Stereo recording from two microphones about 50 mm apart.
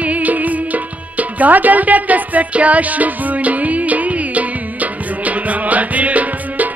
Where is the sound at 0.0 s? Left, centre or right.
Right.